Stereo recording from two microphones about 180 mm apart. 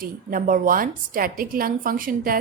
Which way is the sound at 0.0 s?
50° right (ahead or behind).